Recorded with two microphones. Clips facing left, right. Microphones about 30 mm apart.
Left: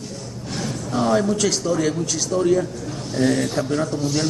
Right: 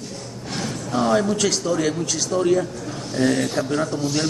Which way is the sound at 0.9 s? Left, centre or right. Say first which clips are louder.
Even; centre.